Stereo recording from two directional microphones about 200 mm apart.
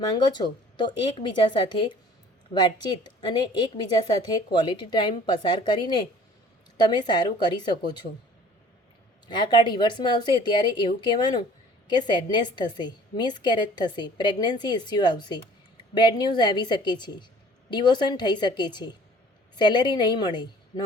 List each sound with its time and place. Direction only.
0.3 s a woman's voice: 20° left (ahead or behind)
9.3 s a woman's voice: 20° left (ahead or behind)